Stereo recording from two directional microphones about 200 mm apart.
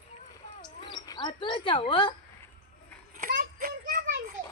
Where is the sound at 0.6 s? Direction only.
25° left (ahead or behind).